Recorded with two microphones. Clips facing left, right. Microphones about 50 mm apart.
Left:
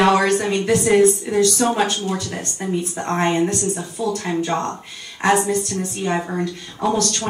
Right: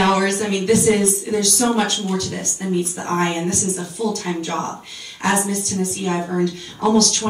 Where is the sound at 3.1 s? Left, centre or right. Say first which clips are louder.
Left 3 dB; centre.